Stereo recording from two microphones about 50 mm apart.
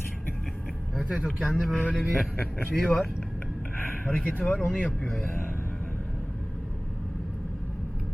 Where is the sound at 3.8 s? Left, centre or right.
Left.